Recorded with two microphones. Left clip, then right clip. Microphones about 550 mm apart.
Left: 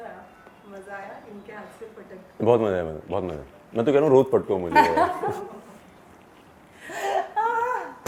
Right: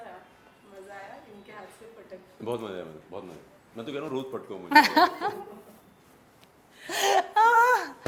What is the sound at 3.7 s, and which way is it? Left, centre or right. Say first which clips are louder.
Speech: left 16 dB; left.